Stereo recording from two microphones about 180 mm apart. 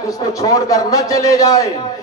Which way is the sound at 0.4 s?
20° left (ahead or behind).